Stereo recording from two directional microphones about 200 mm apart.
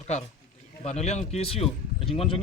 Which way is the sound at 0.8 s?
35° left (ahead or behind).